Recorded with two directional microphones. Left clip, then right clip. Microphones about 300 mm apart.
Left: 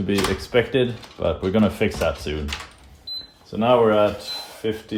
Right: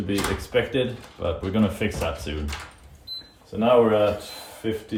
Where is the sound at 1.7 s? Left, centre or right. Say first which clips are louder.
Left 5 dB; centre.